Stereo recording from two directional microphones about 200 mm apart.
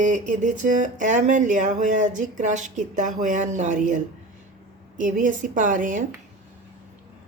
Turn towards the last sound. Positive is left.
turn(degrees=-40)  # may be behind; listen again after turning